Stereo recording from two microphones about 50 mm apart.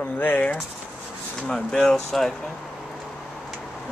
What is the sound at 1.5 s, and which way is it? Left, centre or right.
Speech, centre.